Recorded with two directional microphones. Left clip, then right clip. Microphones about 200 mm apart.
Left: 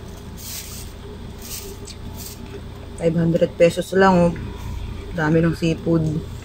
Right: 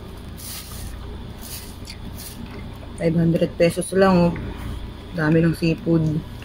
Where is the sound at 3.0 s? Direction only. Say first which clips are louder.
Left 2 dB; 20° right (ahead or behind).